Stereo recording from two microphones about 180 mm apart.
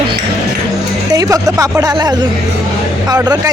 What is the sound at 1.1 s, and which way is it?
Speech, 20° right (ahead or behind).